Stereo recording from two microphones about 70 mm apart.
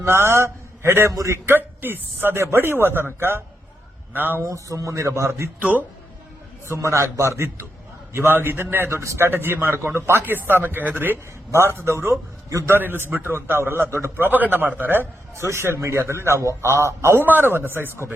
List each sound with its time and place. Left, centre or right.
0.0 s a man's voice: right
1.5 s a man's voice: right
4.4 s speech: right
5.5 s a man's voice: right
6.7 s a man's voice: right
12.7 s a man's voice: right